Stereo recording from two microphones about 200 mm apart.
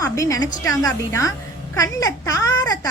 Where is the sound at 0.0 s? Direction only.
15° left (ahead or behind).